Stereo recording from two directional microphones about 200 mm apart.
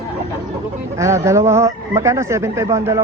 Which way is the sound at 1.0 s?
15° right (ahead or behind).